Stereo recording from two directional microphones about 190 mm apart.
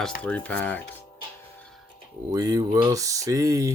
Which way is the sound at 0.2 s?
5° left (ahead or behind).